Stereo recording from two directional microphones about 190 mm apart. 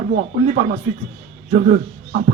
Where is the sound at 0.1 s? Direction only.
40° right (ahead or behind).